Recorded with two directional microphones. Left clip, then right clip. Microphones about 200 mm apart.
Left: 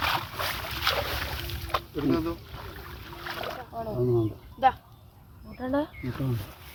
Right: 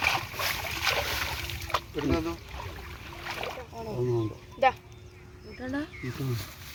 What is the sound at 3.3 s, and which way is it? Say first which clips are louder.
Boat: left 1 dB; 15° left (ahead or behind).